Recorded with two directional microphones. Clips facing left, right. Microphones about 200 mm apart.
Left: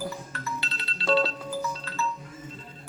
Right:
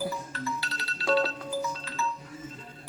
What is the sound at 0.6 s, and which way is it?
Music, 25° left (ahead or behind).